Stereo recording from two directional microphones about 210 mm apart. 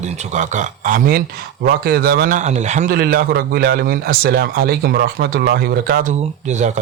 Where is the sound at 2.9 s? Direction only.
45° right (ahead or behind).